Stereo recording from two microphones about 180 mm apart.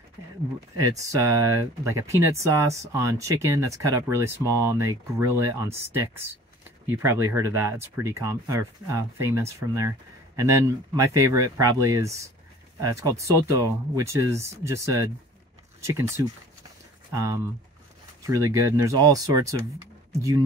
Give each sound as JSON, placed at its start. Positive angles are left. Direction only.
{"t": 0.7, "sound": "speech", "side_deg": -15}
{"t": 18.2, "sound": "speech", "side_deg": -15}